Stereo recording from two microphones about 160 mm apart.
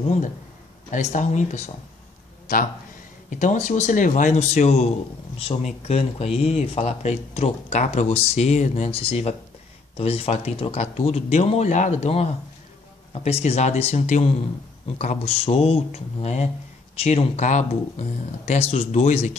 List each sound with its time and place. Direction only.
0.9 s speech: 50° left (ahead or behind)
3.3 s speech: 50° left (ahead or behind)